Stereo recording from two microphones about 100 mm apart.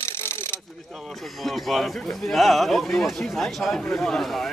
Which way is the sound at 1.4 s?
Centre (ahead or behind).